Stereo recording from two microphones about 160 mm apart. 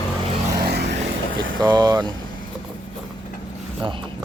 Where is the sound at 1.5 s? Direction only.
25° right (ahead or behind).